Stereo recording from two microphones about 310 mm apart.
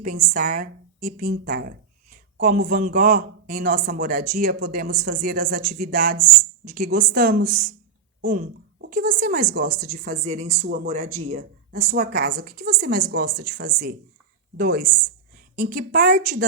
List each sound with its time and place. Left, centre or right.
0.0 s a woman's voice: right